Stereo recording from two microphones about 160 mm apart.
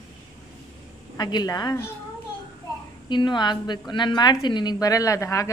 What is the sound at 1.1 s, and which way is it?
Speech, 25° left (ahead or behind).